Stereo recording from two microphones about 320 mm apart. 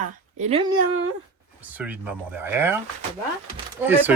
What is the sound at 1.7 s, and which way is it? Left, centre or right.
Speech, centre.